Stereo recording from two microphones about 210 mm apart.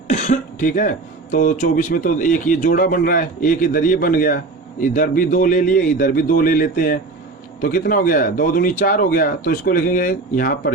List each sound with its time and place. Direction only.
0.1 s speech: 35° left (ahead or behind)